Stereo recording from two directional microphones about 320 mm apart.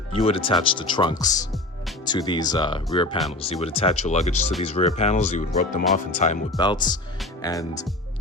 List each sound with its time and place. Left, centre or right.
0.2 s speech: centre